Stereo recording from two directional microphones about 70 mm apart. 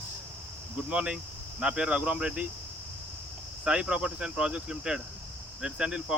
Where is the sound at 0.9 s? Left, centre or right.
Centre.